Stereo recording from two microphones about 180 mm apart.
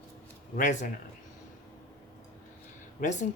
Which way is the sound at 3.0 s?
40° left (ahead or behind).